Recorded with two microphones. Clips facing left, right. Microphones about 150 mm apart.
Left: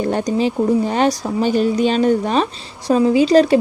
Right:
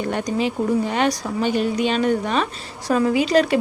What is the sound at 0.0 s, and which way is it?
Speech, 35° left (ahead or behind).